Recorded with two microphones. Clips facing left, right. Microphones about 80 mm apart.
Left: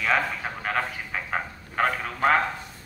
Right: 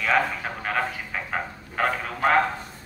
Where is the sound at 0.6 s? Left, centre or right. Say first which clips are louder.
Right 1 dB; centre.